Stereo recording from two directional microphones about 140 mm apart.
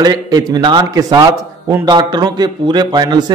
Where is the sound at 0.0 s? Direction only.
30° right (ahead or behind).